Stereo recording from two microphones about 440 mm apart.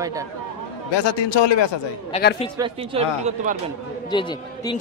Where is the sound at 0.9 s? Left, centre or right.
Left.